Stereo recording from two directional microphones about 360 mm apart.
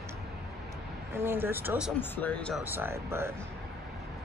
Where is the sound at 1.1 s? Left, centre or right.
Centre.